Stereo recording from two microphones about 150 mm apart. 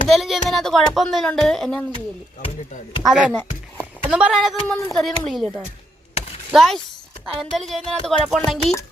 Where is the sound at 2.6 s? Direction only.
50° left (ahead or behind).